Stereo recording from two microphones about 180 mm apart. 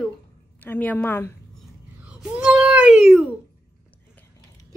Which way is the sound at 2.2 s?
5° right (ahead or behind).